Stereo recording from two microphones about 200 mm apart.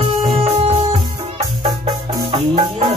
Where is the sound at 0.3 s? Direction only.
30° right (ahead or behind).